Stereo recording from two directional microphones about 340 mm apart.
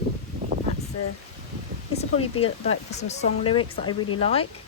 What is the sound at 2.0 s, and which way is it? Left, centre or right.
Speech, centre.